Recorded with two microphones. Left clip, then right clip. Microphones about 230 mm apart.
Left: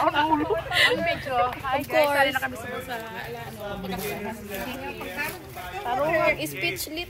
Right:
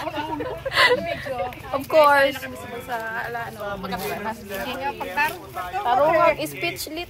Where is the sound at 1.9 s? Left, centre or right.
Right.